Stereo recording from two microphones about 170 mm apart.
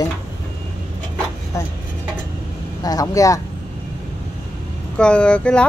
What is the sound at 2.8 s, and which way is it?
Speech, 20° left (ahead or behind).